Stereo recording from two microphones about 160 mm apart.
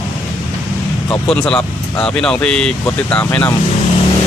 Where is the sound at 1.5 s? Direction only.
5° left (ahead or behind).